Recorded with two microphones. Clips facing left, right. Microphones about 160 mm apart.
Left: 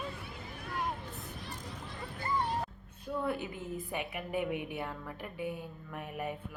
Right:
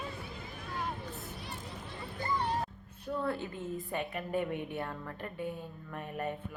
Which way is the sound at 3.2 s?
15° left (ahead or behind).